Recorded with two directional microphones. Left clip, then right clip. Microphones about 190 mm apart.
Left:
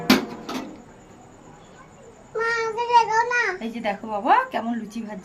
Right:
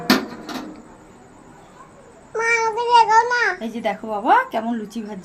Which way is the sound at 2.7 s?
25° right (ahead or behind).